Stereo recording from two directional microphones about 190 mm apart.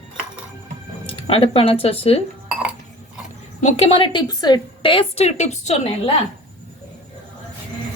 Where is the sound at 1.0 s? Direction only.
30° left (ahead or behind).